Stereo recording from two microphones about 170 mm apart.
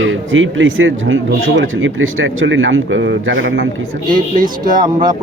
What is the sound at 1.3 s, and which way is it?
Speech, 90° right.